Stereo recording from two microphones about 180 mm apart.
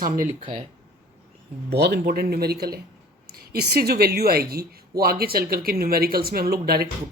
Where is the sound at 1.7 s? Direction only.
65° right (ahead or behind).